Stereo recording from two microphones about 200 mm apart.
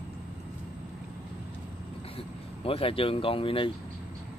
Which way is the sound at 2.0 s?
30° left (ahead or behind).